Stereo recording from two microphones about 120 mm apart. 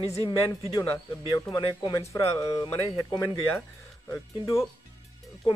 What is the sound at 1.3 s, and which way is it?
Speech, 30° left (ahead or behind).